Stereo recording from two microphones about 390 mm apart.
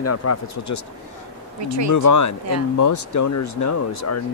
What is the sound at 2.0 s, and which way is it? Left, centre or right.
Speech, left.